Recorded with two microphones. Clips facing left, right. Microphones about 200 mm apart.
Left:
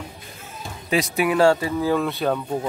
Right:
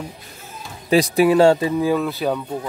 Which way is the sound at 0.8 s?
35° right (ahead or behind).